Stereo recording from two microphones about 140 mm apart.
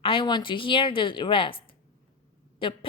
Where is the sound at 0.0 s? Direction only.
40° left (ahead or behind).